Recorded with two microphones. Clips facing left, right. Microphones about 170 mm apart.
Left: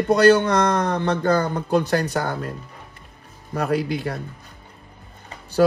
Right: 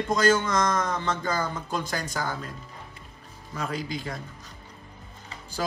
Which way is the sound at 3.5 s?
65° left (ahead or behind).